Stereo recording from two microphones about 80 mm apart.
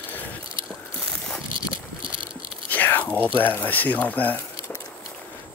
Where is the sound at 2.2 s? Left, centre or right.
Right.